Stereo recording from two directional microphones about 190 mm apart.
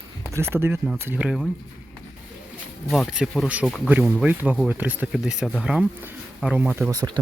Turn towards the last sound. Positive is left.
turn(degrees=-20)  # may be behind; listen again after turning